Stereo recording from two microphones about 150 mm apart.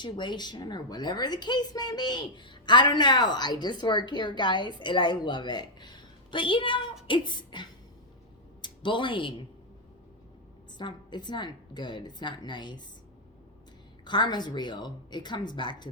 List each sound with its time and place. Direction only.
0.0 s a woman's voice: 30° left (ahead or behind)
7.1 s beatboxing: 30° left (ahead or behind)
8.6 s speech: 30° left (ahead or behind)
10.8 s a woman's voice: 30° left (ahead or behind)
14.0 s a woman's voice: 30° left (ahead or behind)